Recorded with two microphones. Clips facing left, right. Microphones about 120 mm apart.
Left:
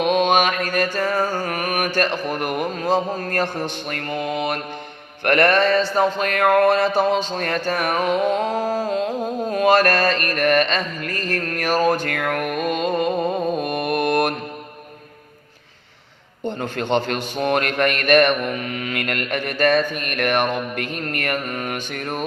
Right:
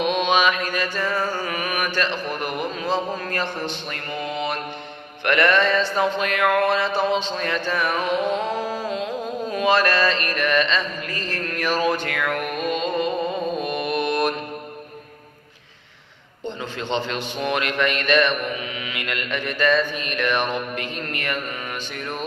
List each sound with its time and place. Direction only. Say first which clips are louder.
0.0 s a man's voice: left 2 dB; 50° left (ahead or behind)
7.3 s a sound: left 2 dB; 50° left (ahead or behind)
16.5 s a man's voice: left 5 dB; 50° left (ahead or behind)